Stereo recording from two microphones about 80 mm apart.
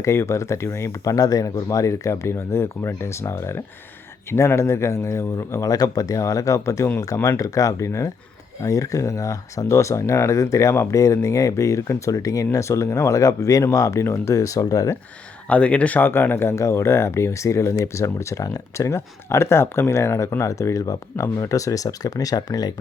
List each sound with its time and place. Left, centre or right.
0.0 s speech: left
7.0 s speech: left
15.4 s speech: centre; by 22.7 s left